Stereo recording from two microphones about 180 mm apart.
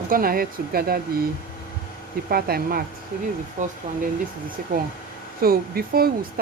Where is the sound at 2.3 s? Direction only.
55° right (ahead or behind).